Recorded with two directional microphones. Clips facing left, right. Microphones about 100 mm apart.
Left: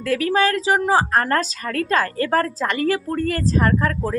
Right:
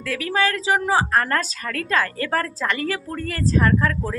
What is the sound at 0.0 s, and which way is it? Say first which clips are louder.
A woman's voice: left 4 dB; 40° left (ahead or behind).